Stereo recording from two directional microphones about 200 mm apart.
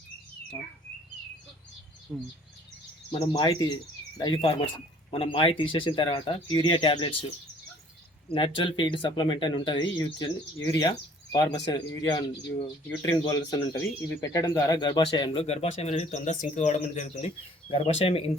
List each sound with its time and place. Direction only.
2.1 s speech: centre (ahead or behind)
3.1 s speech: 25° left (ahead or behind)
8.3 s speech: 25° left (ahead or behind)